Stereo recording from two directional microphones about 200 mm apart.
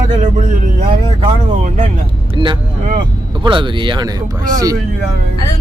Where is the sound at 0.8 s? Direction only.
40° right (ahead or behind).